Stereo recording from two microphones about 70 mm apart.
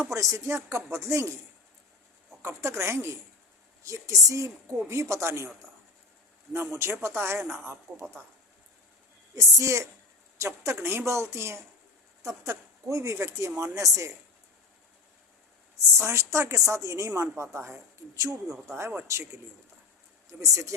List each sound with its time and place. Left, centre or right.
0.1 s speech: right
2.4 s speech: right
3.8 s speech: right
6.5 s speech: right
9.3 s speech: right
16.0 s speech: right
18.8 s speech: right
19.0 s speech: right
20.4 s speech: right